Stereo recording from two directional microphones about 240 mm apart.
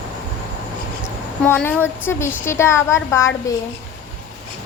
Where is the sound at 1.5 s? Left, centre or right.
Centre.